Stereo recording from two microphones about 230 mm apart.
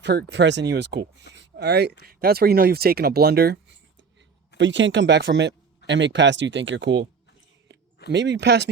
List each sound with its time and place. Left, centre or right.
0.0 s speech: right
8.1 s speech: right